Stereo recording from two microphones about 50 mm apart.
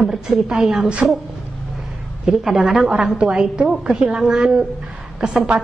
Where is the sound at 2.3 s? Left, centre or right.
Centre.